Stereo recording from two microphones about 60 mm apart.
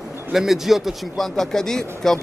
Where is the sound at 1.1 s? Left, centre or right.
Centre.